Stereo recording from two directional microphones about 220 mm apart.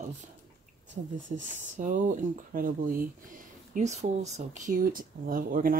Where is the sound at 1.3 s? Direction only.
35° right (ahead or behind).